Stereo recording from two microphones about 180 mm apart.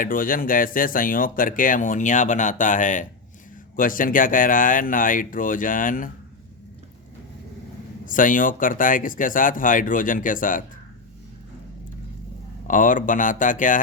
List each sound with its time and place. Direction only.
0.0 s speech: 50° left (ahead or behind)
8.0 s speech: 50° left (ahead or behind)
12.6 s speech: 45° left (ahead or behind)